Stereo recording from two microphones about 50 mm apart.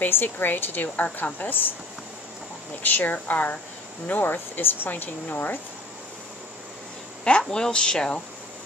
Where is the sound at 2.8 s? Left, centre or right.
Left.